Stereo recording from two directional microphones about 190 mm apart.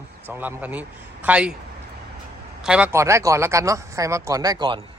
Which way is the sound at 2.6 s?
5° right (ahead or behind).